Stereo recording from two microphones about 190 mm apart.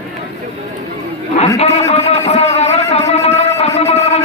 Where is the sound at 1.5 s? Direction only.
35° left (ahead or behind).